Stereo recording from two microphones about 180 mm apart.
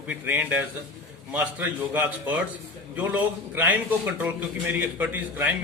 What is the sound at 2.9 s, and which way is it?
A man's voice, 10° right (ahead or behind).